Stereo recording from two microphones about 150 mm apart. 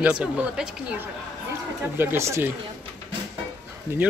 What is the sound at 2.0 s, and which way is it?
Speech, 15° right (ahead or behind).